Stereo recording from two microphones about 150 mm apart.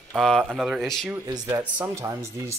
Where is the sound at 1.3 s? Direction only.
25° right (ahead or behind).